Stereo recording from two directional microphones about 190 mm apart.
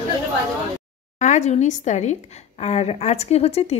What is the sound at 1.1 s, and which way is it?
A woman's voice, 40° left (ahead or behind).